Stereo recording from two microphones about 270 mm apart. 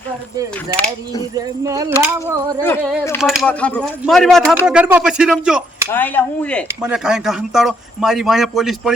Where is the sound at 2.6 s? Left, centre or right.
Centre.